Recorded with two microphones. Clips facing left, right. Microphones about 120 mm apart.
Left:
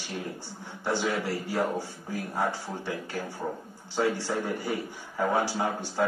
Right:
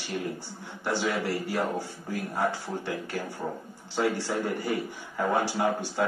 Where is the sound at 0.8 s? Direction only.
20° left (ahead or behind).